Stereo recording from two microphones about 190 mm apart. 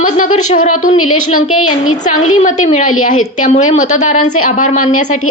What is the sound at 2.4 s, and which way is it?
A woman's voice, 40° left (ahead or behind).